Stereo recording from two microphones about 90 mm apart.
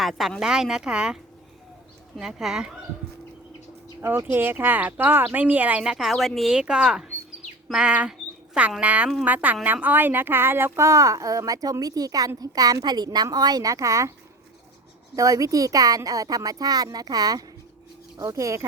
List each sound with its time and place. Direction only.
0.0 s speech: centre (ahead or behind)
4.0 s speech: 25° right (ahead or behind)
5.8 s speech: 5° right (ahead or behind); by 14.1 s 35° right (ahead or behind)
15.1 s speech: 40° right (ahead or behind)
18.3 s speech: 35° right (ahead or behind)